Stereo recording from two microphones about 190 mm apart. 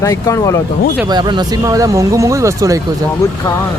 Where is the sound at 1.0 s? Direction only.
25° right (ahead or behind).